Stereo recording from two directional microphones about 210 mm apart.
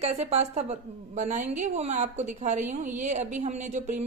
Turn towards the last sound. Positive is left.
turn(degrees=-35)  # may be behind; listen again after turning